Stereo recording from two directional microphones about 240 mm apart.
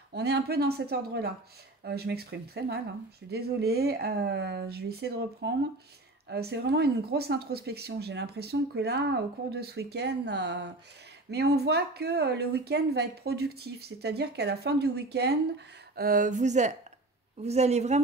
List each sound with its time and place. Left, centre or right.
0.1 s speech: right